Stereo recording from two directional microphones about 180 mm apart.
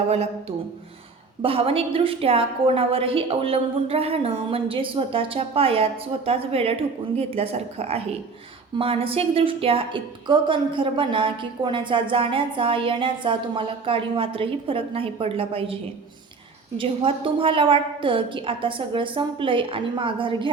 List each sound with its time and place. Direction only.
0.1 s a woman's voice: 35° right (ahead or behind)